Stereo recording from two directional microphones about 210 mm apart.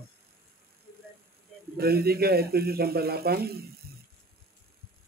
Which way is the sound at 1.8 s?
45° right (ahead or behind).